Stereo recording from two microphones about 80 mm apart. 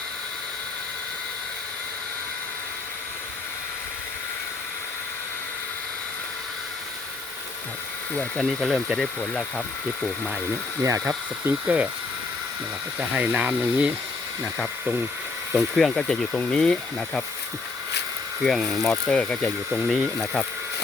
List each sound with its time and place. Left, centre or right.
8.4 s speech: centre
11.4 s speech: centre
13.1 s speech: centre
15.5 s speech: centre
18.4 s speech: centre
19.7 s speech: centre